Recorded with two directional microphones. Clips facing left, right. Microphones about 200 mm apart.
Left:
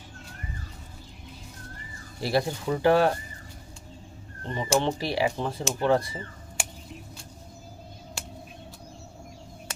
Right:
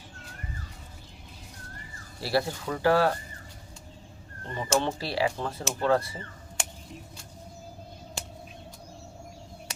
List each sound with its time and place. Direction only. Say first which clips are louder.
2.2 s speech: left 2 dB; 20° left (ahead or behind)
4.4 s speech: left 2 dB; 15° left (ahead or behind)